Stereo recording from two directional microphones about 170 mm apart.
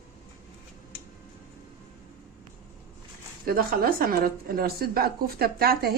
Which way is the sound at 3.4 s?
60° right (ahead or behind).